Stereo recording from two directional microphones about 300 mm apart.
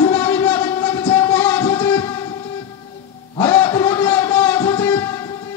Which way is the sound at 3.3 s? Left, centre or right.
Centre.